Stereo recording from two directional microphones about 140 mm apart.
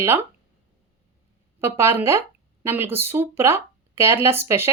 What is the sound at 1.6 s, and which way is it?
Speech, 20° right (ahead or behind).